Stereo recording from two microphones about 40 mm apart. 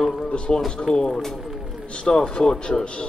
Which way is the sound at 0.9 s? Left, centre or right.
Left.